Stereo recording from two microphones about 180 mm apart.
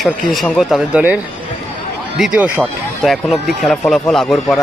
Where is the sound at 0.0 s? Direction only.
Centre (ahead or behind).